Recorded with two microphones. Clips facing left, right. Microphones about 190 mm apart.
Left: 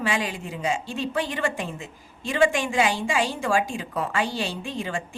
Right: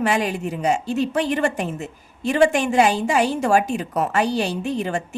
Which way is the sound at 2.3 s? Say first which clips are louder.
Right 5 dB; 45° right (ahead or behind).